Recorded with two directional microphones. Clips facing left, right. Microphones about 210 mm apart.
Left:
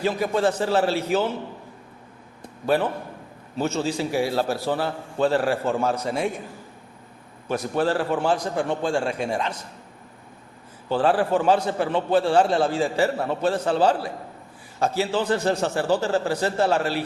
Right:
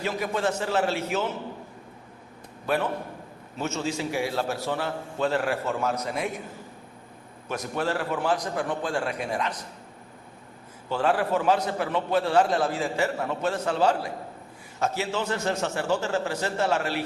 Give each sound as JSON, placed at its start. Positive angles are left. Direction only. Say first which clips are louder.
{"t": 0.0, "sound": "a man's voice", "louder": "left 5 dB", "side_deg": 35}
{"t": 3.6, "sound": "a man's voice", "louder": "left 5 dB", "side_deg": 35}
{"t": 7.4, "sound": "a man's voice", "louder": "left 5 dB", "side_deg": 30}
{"t": 10.8, "sound": "a man's voice", "louder": "left 4 dB", "side_deg": 30}